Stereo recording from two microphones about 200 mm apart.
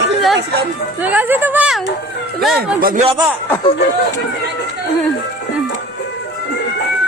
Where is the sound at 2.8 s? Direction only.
45° right (ahead or behind).